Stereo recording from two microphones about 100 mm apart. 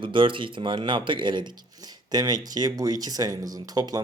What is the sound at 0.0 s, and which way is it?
Speech, 55° right (ahead or behind).